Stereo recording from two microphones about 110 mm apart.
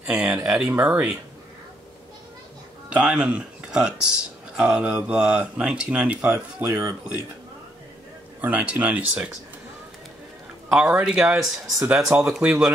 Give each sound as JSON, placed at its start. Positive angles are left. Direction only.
{"t": 0.0, "sound": "speech", "side_deg": -10}
{"t": 2.9, "sound": "speech", "side_deg": -10}
{"t": 6.2, "sound": "speech", "side_deg": -25}
{"t": 8.4, "sound": "speech", "side_deg": -15}
{"t": 10.7, "sound": "speech", "side_deg": -10}